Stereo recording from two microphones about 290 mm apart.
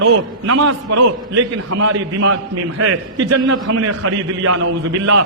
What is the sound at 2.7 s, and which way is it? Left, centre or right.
A man's voice, right.